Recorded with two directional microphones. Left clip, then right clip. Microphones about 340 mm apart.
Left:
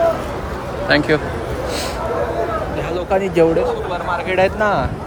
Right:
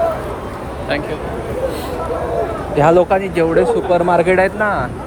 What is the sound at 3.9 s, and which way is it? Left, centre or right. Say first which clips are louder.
Speech: right 8 dB; right.